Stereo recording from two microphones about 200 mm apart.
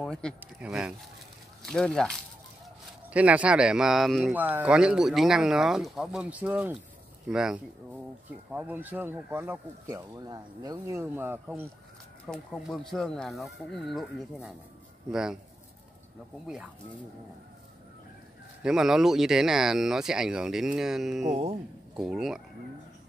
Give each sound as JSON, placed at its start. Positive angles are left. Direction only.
{"t": 0.0, "sound": "speech", "side_deg": 5}
{"t": 12.3, "sound": "speech", "side_deg": 0}
{"t": 16.4, "sound": "speech", "side_deg": -5}
{"t": 18.6, "sound": "speech", "side_deg": 0}
{"t": 21.3, "sound": "speech", "side_deg": -30}
{"t": 21.9, "sound": "speech", "side_deg": -5}